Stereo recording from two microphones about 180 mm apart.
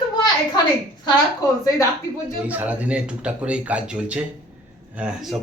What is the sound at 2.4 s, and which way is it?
A man's voice, 10° right (ahead or behind).